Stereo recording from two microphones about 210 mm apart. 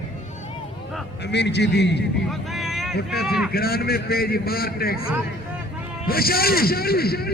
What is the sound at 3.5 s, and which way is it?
Speech, 45° left (ahead or behind).